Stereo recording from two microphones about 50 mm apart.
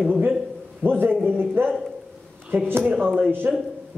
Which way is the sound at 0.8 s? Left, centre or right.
Right.